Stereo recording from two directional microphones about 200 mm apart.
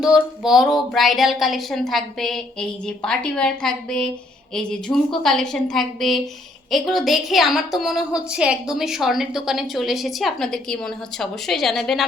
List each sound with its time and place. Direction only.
0.0 s a woman's voice: centre (ahead or behind)